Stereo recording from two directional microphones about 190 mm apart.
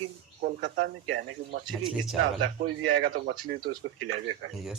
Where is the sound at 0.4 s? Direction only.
45° right (ahead or behind).